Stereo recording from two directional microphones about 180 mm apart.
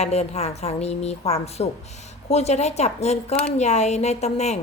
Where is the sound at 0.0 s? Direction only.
35° left (ahead or behind).